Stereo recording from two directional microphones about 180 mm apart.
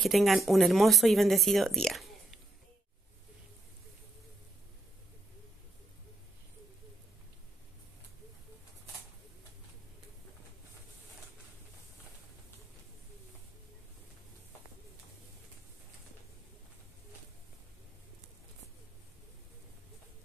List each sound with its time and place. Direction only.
0.0 s speech: centre (ahead or behind)